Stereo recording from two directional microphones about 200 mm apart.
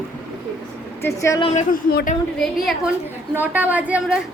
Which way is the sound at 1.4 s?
35° left (ahead or behind).